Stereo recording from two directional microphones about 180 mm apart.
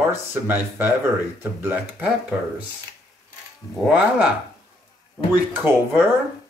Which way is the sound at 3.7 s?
5° right (ahead or behind).